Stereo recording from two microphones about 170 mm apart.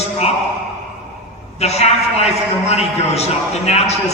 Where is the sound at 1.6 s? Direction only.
40° left (ahead or behind).